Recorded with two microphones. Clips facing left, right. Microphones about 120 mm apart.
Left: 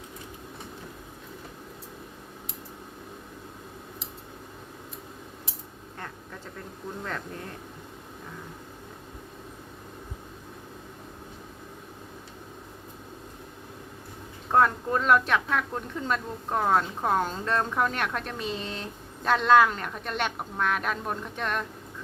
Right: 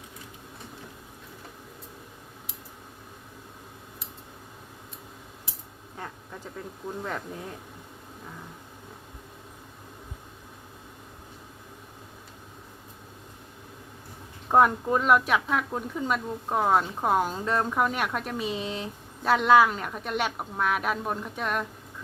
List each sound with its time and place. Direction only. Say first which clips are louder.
7.0 s a woman's voice: right 1 dB; 10° right (ahead or behind)
14.5 s a woman's voice: right 2 dB; 15° right (ahead or behind)